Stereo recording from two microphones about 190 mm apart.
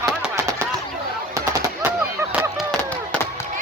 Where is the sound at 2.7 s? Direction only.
5° left (ahead or behind).